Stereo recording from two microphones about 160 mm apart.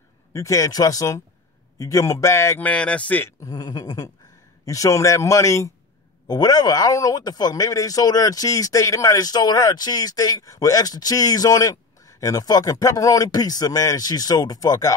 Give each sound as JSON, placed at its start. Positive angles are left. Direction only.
{"t": 0.3, "sound": "speech", "side_deg": 20}